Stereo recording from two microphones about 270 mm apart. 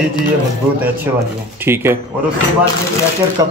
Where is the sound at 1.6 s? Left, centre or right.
Centre.